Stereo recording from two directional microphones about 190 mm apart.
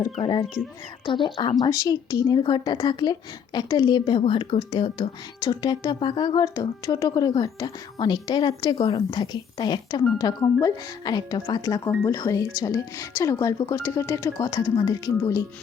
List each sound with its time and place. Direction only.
0.2 s a woman's voice: 25° left (ahead or behind)